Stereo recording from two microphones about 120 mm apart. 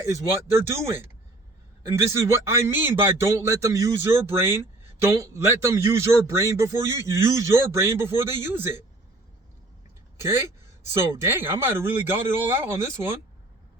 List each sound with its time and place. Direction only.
1.9 s a man's voice: 25° right (ahead or behind)
10.2 s a man's voice: 20° right (ahead or behind)